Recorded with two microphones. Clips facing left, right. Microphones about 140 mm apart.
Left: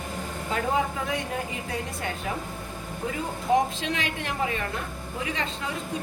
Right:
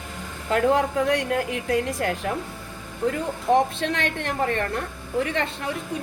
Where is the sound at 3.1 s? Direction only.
60° right (ahead or behind).